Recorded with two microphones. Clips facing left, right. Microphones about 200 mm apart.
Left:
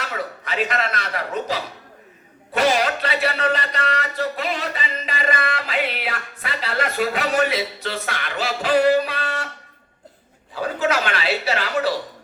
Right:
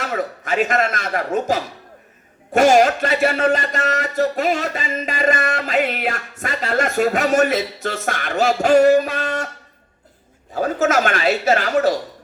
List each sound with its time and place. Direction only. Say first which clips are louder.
0.0 s speech: right 5 dB; 45° right (ahead or behind)
10.5 s speech: right 4 dB; 45° right (ahead or behind)